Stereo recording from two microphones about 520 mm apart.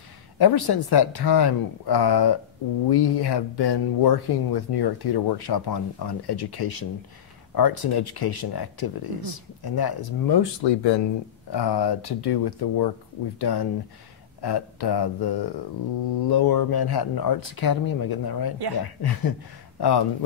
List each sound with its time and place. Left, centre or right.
0.4 s speech: left